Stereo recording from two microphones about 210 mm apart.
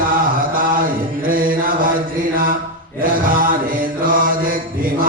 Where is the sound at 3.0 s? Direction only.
40° right (ahead or behind).